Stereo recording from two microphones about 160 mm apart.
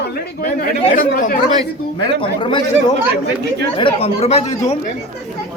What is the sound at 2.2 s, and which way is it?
Speech, 30° left (ahead or behind).